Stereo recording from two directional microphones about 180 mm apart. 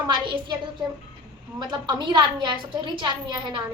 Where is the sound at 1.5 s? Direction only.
25° right (ahead or behind).